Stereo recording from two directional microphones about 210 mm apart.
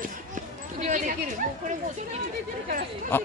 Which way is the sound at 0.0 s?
35° right (ahead or behind).